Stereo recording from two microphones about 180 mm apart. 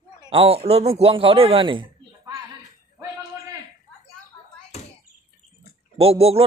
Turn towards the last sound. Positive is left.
turn(degrees=-35)  # may be behind; listen again after turning